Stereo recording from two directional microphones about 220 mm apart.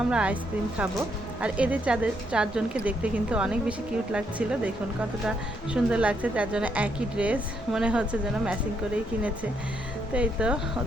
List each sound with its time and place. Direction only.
0.1 s speech: 5° right (ahead or behind)
1.4 s speech: 5° right (ahead or behind)
5.7 s speech: 5° right (ahead or behind)
10.2 s speech: 5° right (ahead or behind)